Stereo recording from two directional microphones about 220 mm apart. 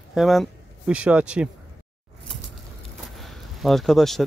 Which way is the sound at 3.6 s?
Centre (ahead or behind).